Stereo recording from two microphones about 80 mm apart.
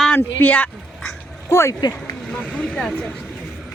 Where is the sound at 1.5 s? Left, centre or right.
Left.